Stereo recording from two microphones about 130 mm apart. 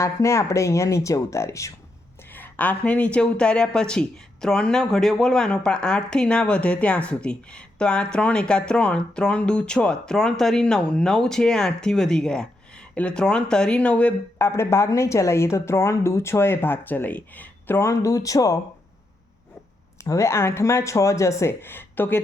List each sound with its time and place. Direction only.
0.0 s a woman's voice: 20° left (ahead or behind)
20.1 s speech: 20° left (ahead or behind)